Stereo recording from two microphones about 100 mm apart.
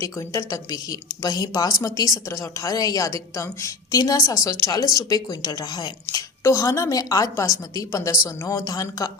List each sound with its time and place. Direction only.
0.0 s a woman's voice: 30° left (ahead or behind)